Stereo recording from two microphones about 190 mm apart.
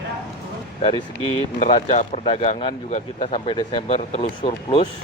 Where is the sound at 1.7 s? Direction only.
25° left (ahead or behind).